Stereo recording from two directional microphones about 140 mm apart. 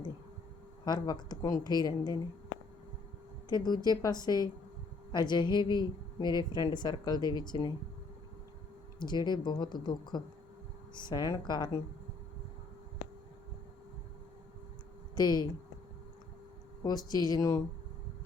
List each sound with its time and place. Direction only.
0.9 s speech: 30° left (ahead or behind)
3.5 s a woman's voice: 30° left (ahead or behind)
9.0 s a woman's voice: 30° left (ahead or behind)
15.1 s speech: 30° left (ahead or behind)
16.8 s speech: 30° left (ahead or behind)